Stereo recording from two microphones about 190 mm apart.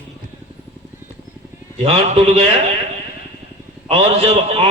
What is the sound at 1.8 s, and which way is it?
Speech, 30° right (ahead or behind).